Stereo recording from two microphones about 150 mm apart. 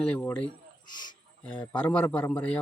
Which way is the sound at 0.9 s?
30° left (ahead or behind).